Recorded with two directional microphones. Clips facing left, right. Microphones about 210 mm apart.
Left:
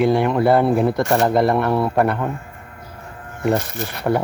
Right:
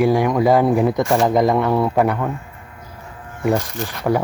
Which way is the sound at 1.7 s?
5° left (ahead or behind).